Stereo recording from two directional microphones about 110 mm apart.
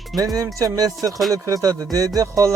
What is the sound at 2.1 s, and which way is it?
Speech, 30° right (ahead or behind).